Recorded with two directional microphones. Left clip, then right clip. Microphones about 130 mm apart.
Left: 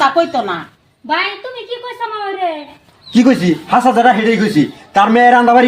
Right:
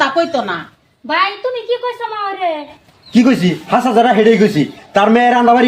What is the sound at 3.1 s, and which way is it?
A man's voice, 35° right (ahead or behind).